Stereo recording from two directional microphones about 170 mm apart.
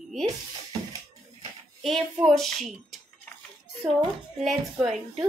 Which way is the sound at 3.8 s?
30° right (ahead or behind).